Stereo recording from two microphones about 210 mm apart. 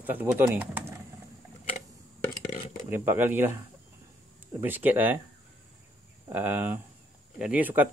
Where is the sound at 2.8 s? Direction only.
10° right (ahead or behind).